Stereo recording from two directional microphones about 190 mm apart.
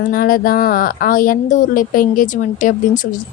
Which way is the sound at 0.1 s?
50° left (ahead or behind).